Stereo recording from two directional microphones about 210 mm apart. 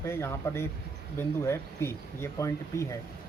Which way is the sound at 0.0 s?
10° left (ahead or behind).